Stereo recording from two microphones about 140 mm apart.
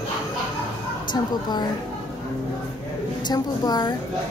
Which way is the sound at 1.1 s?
30° left (ahead or behind).